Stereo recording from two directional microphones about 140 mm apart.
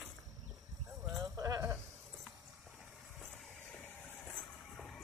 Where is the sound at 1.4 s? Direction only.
20° right (ahead or behind).